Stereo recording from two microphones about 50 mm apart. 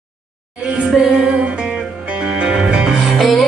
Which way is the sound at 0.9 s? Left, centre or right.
Centre.